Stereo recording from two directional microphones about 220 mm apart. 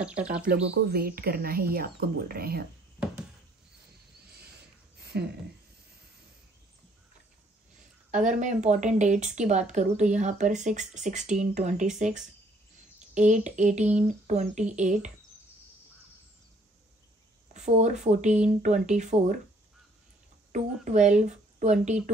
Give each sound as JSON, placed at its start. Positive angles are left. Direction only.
{"t": 0.0, "sound": "speech", "side_deg": -5}
{"t": 0.7, "sound": "speech", "side_deg": -45}
{"t": 4.9, "sound": "a sound", "side_deg": -45}
{"t": 8.1, "sound": "a woman's voice", "side_deg": -35}
{"t": 17.6, "sound": "a woman's voice", "side_deg": -30}
{"t": 20.5, "sound": "a woman's voice", "side_deg": -35}